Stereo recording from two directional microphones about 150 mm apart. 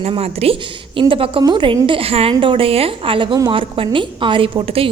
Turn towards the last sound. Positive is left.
turn(degrees=-40)  # may be behind; listen again after turning